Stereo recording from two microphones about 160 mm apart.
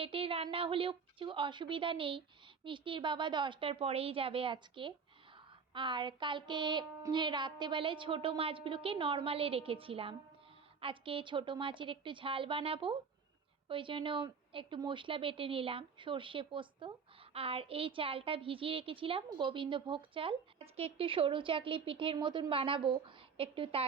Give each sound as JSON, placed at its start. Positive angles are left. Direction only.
{"t": 0.0, "sound": "child singing", "side_deg": -35}